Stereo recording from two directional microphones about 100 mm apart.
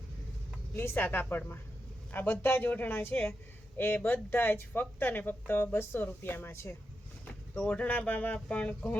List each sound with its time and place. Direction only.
0.8 s speech: 20° left (ahead or behind)
7.5 s speech: 10° left (ahead or behind)